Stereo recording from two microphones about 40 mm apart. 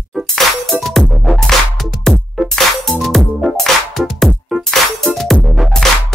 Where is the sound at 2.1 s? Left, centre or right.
Centre.